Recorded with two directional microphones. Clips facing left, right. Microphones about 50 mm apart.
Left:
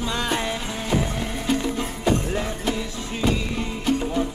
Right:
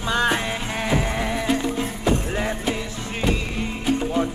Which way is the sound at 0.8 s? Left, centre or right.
Right.